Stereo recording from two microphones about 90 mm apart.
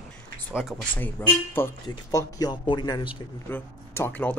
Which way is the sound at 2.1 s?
40° left (ahead or behind).